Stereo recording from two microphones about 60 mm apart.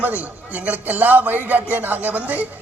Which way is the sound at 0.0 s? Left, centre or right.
Right.